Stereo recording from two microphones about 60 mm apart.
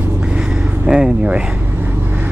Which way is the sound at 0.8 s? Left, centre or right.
Centre.